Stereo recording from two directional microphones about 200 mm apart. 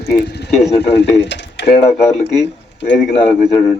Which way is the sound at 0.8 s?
60° left (ahead or behind).